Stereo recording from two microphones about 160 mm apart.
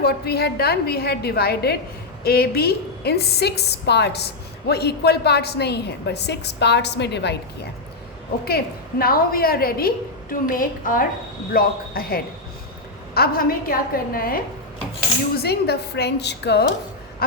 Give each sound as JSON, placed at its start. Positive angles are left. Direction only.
{"t": 0.0, "sound": "a woman's voice", "side_deg": 85}
{"t": 8.4, "sound": "a woman's voice", "side_deg": 70}
{"t": 15.4, "sound": "a woman's voice", "side_deg": 90}